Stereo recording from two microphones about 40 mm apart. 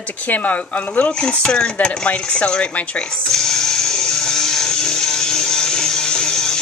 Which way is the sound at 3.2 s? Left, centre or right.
Centre.